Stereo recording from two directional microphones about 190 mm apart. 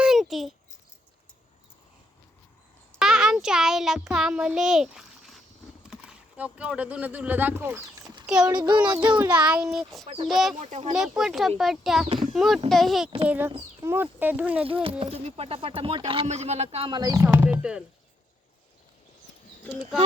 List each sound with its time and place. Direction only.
0.0 s a sound: centre (ahead or behind)
3.0 s a child's voice: centre (ahead or behind)
10.6 s speech: 35° right (ahead or behind)
10.9 s speech: centre (ahead or behind)
12.0 s speech: 30° right (ahead or behind)
12.3 s a child's voice: centre (ahead or behind)
14.7 s speech: 30° right (ahead or behind); by 17.8 s 5° right (ahead or behind)